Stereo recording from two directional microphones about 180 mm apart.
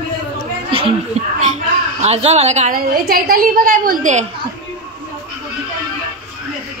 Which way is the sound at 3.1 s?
55° right (ahead or behind).